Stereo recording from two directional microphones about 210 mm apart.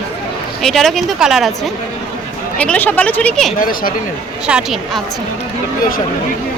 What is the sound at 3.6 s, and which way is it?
Speech, 40° left (ahead or behind).